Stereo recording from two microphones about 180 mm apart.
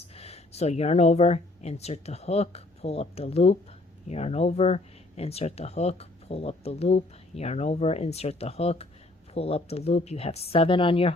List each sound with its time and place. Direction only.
0.1 s speech: 35° left (ahead or behind)